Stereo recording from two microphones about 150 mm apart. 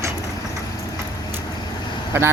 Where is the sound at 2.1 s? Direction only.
15° right (ahead or behind).